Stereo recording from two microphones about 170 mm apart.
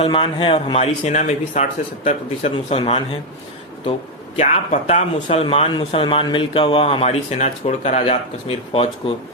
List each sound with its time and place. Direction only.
0.0 s speech: 30° left (ahead or behind)
4.4 s speech: 40° left (ahead or behind)